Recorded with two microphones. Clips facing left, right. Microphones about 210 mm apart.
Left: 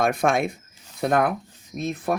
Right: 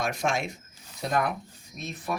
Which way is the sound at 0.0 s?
55° left (ahead or behind).